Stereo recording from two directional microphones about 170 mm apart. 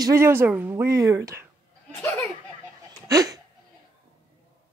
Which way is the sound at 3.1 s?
20° right (ahead or behind).